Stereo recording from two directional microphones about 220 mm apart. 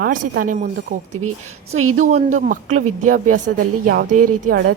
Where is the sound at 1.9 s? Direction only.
35° right (ahead or behind).